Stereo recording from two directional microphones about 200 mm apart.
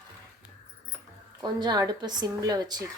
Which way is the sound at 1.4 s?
20° right (ahead or behind).